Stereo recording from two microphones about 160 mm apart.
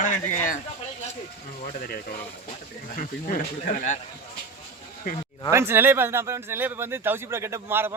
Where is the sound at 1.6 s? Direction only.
60° left (ahead or behind).